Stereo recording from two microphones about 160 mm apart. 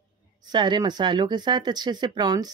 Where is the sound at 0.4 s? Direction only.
25° right (ahead or behind).